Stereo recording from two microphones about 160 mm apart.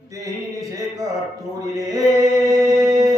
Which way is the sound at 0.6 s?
20° right (ahead or behind).